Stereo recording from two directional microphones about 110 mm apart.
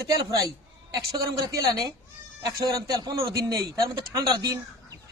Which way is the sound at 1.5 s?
35° right (ahead or behind).